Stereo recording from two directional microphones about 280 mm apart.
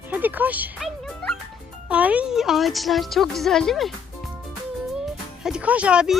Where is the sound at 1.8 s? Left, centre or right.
Centre.